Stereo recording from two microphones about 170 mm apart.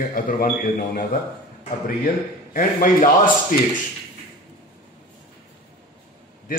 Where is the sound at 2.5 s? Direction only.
55° left (ahead or behind).